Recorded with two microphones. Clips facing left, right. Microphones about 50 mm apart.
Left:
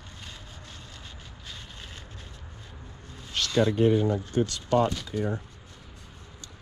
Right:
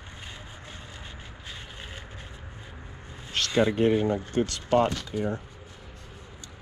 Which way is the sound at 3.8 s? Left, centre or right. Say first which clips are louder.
Even; right.